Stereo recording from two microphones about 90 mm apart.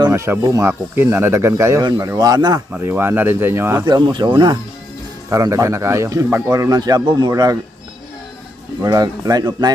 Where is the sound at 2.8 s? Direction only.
25° right (ahead or behind).